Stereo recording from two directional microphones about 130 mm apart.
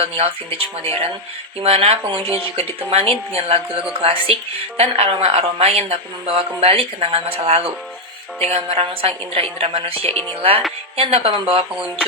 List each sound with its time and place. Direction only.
0.0 s speech: 50° right (ahead or behind)
1.6 s speech: 50° right (ahead or behind)